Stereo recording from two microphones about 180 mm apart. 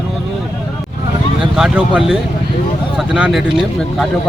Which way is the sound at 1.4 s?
5° right (ahead or behind).